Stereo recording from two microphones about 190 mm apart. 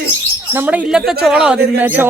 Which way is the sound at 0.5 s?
10° right (ahead or behind).